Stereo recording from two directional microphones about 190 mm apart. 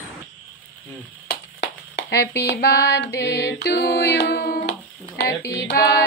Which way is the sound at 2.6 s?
55° left (ahead or behind).